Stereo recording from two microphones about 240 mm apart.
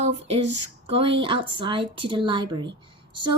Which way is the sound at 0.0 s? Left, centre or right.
Right.